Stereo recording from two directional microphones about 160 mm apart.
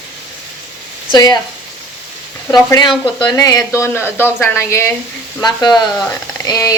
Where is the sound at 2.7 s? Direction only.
25° left (ahead or behind).